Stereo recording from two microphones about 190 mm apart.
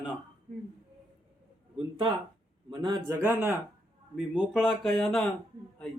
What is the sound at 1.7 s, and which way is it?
A man's voice, 25° right (ahead or behind).